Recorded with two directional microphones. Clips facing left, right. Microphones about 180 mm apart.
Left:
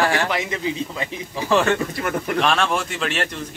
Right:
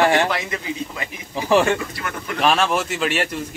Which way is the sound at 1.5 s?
15° right (ahead or behind).